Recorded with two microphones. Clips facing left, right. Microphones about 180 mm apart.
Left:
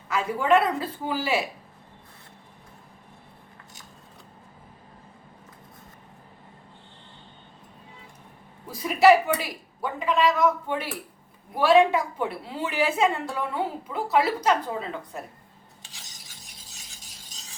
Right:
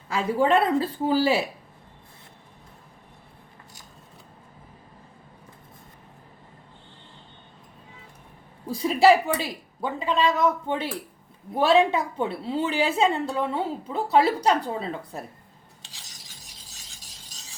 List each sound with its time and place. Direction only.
0.1 s a woman's voice: 30° right (ahead or behind)
8.8 s a woman's voice: 30° right (ahead or behind)